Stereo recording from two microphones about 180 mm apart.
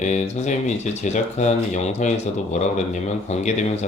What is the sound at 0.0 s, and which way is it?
Speech, 40° left (ahead or behind).